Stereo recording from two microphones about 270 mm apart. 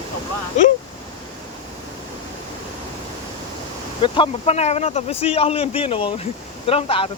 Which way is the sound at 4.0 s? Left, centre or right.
Left.